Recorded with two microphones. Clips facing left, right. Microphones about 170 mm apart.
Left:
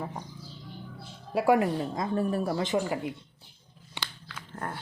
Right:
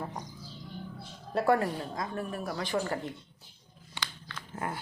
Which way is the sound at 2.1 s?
30° left (ahead or behind).